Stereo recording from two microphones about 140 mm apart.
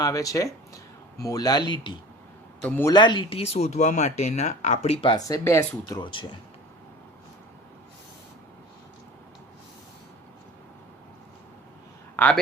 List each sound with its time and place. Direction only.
0.0 s speech: 25° left (ahead or behind)
2.6 s a man's voice: 15° left (ahead or behind)
2.9 s speech: 35° left (ahead or behind)
5.1 s speech: 25° left (ahead or behind)
12.1 s a sound: 10° left (ahead or behind)